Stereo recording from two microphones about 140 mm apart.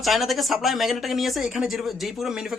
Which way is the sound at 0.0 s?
Centre (ahead or behind).